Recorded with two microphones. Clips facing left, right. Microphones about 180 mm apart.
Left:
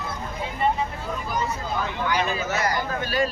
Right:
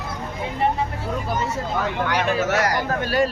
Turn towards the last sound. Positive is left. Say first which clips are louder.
# right 4 dB
turn(degrees=-70)  # may be behind; listen again after turning